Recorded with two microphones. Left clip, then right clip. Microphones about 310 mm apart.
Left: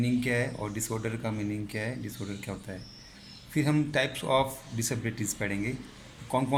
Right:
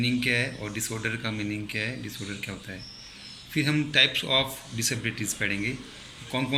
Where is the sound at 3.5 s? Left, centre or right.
Left.